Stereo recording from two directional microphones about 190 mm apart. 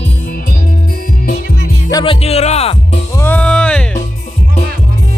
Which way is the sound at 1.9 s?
20° left (ahead or behind).